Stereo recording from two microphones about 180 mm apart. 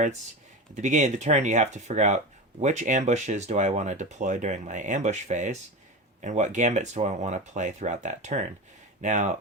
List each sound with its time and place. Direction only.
0.8 s speech: 40° right (ahead or behind)